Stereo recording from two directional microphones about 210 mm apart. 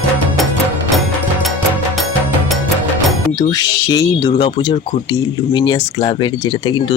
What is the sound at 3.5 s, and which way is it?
Speech, 15° left (ahead or behind).